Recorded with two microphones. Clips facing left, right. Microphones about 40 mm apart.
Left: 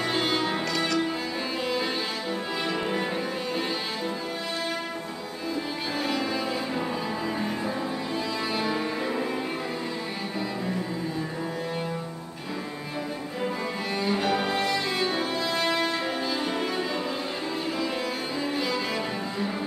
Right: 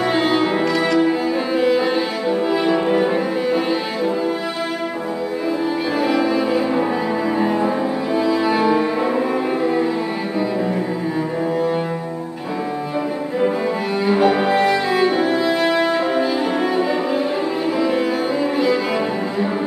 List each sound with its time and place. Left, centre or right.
0.0 s music: centre
2.5 s cello: centre
5.9 s music: centre
7.3 s cello: right
8.2 s music: centre
14.0 s cello: centre
17.7 s music: centre